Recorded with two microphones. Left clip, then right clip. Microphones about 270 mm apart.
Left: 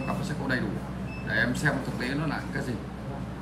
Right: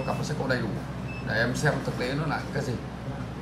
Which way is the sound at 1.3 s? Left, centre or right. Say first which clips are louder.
Even; centre.